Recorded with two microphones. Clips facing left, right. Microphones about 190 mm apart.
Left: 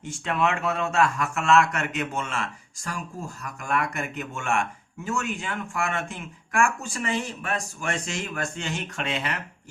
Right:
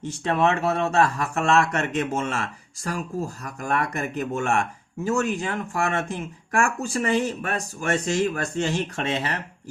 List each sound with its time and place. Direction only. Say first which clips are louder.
0.1 s speech: right 3 dB; 35° right (ahead or behind)